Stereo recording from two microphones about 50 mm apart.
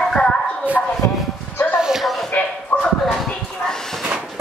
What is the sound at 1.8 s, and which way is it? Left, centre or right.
Music, centre.